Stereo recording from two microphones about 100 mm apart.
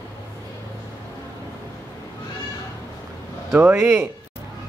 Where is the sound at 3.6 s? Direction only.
25° right (ahead or behind).